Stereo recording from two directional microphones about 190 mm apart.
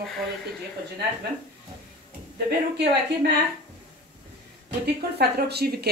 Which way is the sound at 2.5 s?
55° right (ahead or behind).